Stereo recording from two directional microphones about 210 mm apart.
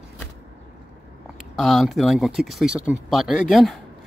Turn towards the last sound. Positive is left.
turn(degrees=0)  # may be behind; listen again after turning